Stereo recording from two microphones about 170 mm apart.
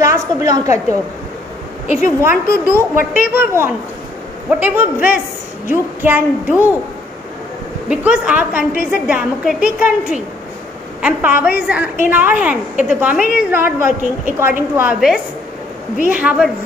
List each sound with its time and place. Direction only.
0.0 s a woman's voice: 20° right (ahead or behind)
2.0 s a woman's voice: 15° right (ahead or behind)
7.9 s a woman's voice: 10° right (ahead or behind)
16.1 s a woman's voice: 10° right (ahead or behind)